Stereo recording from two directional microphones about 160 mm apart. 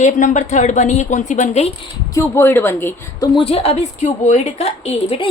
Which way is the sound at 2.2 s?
15° left (ahead or behind).